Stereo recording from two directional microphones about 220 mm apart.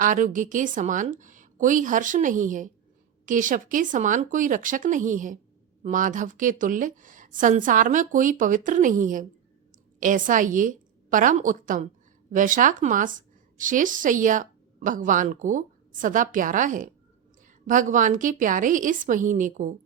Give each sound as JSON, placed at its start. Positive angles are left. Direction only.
{"t": 0.0, "sound": "a woman's voice", "side_deg": -35}